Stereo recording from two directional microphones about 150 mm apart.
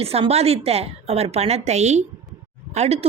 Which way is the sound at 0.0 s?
40° right (ahead or behind).